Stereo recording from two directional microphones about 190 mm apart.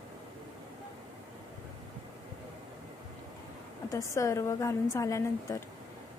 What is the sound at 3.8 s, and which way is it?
A woman's voice, 15° left (ahead or behind).